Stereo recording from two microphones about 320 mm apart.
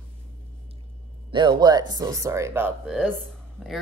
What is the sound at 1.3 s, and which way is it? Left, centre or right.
Speech, centre.